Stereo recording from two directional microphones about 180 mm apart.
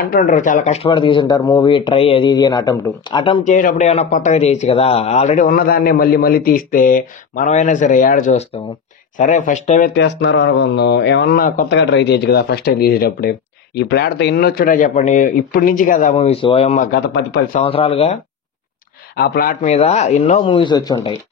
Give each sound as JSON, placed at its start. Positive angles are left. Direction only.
{"t": 0.0, "sound": "speech", "side_deg": 50}
{"t": 3.4, "sound": "speech", "side_deg": 45}
{"t": 9.9, "sound": "speech", "side_deg": 80}
{"t": 11.8, "sound": "speech", "side_deg": 75}
{"t": 16.9, "sound": "speech", "side_deg": 65}
{"t": 17.6, "sound": "speech", "side_deg": 30}
{"t": 19.1, "sound": "speech", "side_deg": 60}
{"t": 19.6, "sound": "speech", "side_deg": 40}
{"t": 20.5, "sound": "speech", "side_deg": 25}